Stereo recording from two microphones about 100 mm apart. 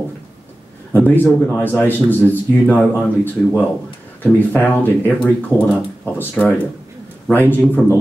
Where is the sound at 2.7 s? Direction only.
10° left (ahead or behind).